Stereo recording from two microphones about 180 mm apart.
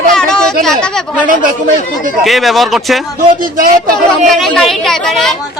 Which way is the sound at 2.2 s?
Centre (ahead or behind).